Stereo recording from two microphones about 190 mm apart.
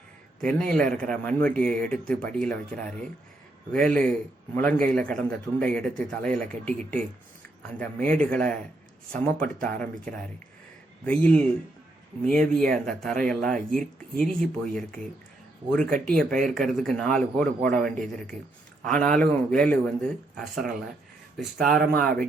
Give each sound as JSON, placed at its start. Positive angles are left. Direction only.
{"t": 0.4, "sound": "speech", "side_deg": 5}